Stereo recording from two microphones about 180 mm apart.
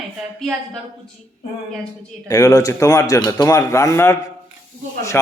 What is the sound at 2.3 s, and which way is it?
A man's voice, 20° left (ahead or behind).